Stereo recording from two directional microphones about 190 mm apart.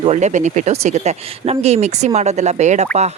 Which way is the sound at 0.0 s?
35° right (ahead or behind).